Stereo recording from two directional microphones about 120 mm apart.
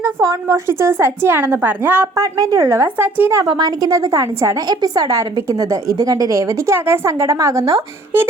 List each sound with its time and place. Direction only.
0.0 s a woman's voice: 25° right (ahead or behind)
3.4 s a woman's voice: 40° right (ahead or behind)